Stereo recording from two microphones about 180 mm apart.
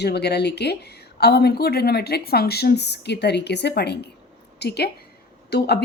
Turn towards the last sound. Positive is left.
turn(degrees=65)  # may be behind; listen again after turning